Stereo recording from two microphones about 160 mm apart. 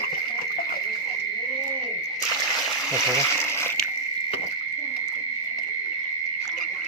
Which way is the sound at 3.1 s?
15° left (ahead or behind).